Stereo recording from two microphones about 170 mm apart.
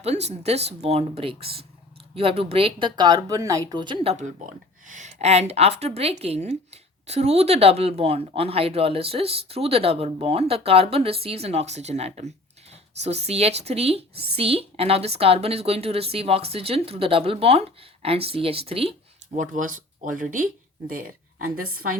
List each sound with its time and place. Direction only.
0.0 s speech: 40° right (ahead or behind); by 21.9 s 60° right (ahead or behind)